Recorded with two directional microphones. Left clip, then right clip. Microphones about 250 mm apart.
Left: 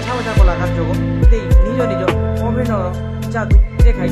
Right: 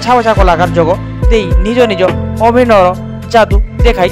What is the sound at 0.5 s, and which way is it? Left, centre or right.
Speech, right.